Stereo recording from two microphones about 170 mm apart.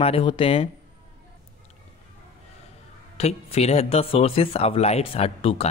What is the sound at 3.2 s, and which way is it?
Speech, 40° left (ahead or behind).